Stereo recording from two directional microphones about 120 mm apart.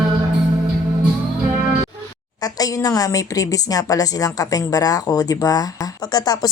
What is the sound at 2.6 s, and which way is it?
A woman's voice, 30° left (ahead or behind).